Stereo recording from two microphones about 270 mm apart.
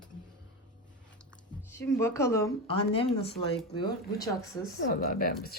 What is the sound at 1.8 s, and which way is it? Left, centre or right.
Speech, centre.